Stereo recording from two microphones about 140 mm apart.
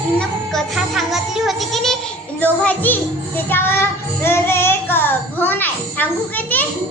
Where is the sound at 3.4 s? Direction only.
15° left (ahead or behind).